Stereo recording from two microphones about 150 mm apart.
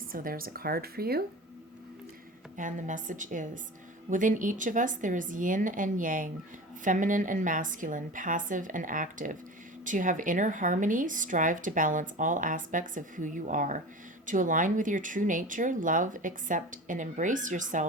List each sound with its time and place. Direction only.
0.1 s speech: 70° right (ahead or behind); by 1.2 s 90° right
2.6 s a woman's voice: 60° right (ahead or behind)